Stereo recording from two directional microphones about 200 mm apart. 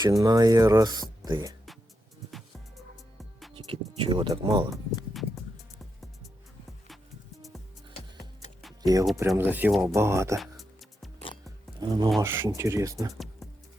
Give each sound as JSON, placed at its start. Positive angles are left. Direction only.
{"t": 0.0, "sound": "speech", "side_deg": -15}
{"t": 3.5, "sound": "speech", "side_deg": -25}
{"t": 8.8, "sound": "speech", "side_deg": -20}
{"t": 10.3, "sound": "music", "side_deg": 0}
{"t": 11.4, "sound": "a sound", "side_deg": -20}
{"t": 12.2, "sound": "speech", "side_deg": -10}